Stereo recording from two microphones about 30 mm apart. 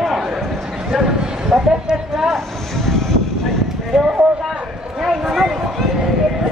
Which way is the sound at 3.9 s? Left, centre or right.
Centre.